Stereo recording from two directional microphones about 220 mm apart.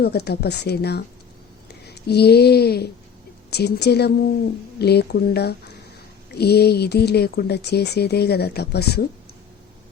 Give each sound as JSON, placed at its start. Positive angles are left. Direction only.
{"t": 0.0, "sound": "speech", "side_deg": 45}
{"t": 2.0, "sound": "speech", "side_deg": 45}